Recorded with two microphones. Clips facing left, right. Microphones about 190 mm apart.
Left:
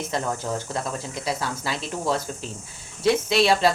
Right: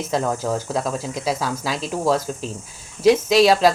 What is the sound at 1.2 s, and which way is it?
Speech, 90° right.